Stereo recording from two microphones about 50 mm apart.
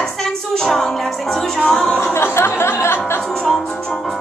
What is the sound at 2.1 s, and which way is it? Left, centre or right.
Speech, left.